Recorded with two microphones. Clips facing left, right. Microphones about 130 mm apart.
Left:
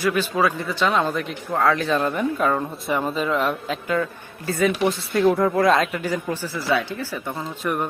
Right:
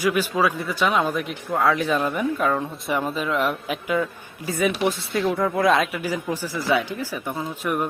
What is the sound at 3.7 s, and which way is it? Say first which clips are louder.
A woman's voice: even; 10° right (ahead or behind).